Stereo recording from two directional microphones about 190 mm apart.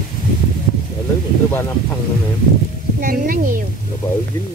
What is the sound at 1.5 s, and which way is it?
Speech, 10° left (ahead or behind).